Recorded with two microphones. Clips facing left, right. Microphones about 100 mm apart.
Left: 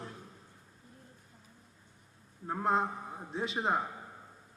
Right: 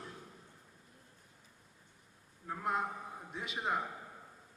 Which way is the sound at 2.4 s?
35° left (ahead or behind).